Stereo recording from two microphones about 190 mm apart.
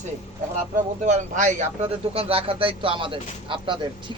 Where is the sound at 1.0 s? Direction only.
40° right (ahead or behind).